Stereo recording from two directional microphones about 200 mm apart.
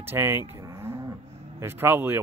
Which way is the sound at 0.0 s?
10° right (ahead or behind).